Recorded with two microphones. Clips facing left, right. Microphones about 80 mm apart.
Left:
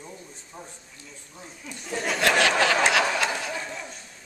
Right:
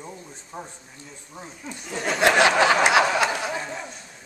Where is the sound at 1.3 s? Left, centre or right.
Right.